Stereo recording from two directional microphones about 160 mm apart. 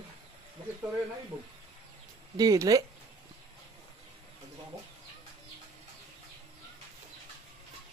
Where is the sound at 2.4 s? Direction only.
20° right (ahead or behind).